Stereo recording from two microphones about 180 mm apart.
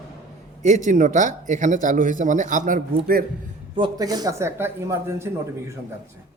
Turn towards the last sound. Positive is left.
turn(degrees=-15)  # may be behind; listen again after turning